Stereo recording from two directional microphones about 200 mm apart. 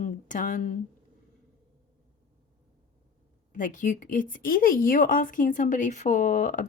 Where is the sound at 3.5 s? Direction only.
40° left (ahead or behind).